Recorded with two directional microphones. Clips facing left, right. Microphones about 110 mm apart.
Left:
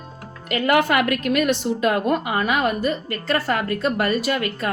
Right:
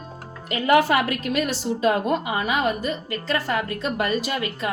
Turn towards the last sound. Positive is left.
turn(degrees=55)  # may be behind; listen again after turning